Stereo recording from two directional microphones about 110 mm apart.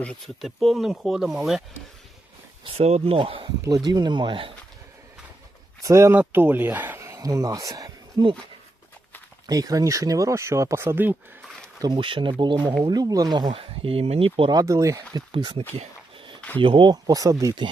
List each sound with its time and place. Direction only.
0.4 s speech: centre (ahead or behind)
2.6 s speech: 70° right (ahead or behind)
3.2 s speech: 55° right (ahead or behind)
3.6 s speech: 35° right (ahead or behind); by 4.5 s 50° right (ahead or behind)
5.8 s speech: 25° right (ahead or behind)
8.2 s speech: 40° right (ahead or behind)
9.5 s speech: 35° right (ahead or behind)
11.8 s speech: 45° right (ahead or behind)
13.6 s speech: 60° right (ahead or behind)
14.5 s speech: 30° right (ahead or behind)
16.6 s speech: 50° right (ahead or behind)